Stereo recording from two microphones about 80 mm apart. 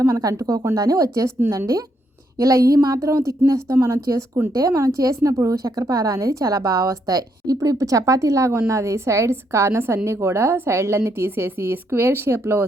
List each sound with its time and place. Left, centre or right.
0.0 s a woman's voice: right